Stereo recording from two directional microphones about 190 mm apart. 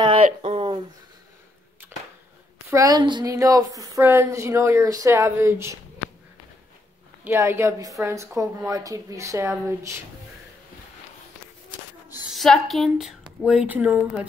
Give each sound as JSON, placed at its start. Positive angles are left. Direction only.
{"t": 0.0, "sound": "a sound", "side_deg": -30}
{"t": 2.7, "sound": "a woman's voice", "side_deg": -20}
{"t": 7.2, "sound": "a woman's voice", "side_deg": -15}
{"t": 12.3, "sound": "a woman's voice", "side_deg": 0}